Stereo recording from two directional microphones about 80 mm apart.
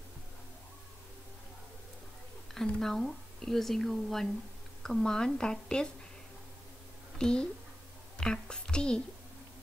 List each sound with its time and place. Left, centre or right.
2.5 s a woman's voice: centre
7.2 s speech: centre